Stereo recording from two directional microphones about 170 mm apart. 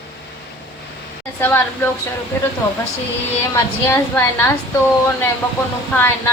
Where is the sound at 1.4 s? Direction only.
10° left (ahead or behind).